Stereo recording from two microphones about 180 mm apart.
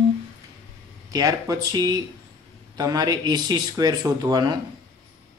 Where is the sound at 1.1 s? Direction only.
20° right (ahead or behind).